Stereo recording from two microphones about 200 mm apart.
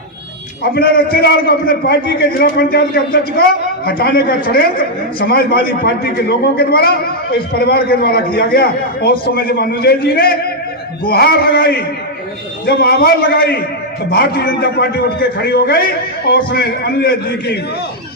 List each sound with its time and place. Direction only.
0.6 s a man's voice: 50° left (ahead or behind)